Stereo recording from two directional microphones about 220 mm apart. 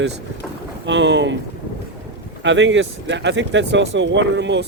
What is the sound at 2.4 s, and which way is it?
Speech, 55° right (ahead or behind).